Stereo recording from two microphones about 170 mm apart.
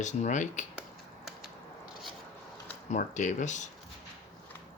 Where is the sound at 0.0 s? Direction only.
45° left (ahead or behind).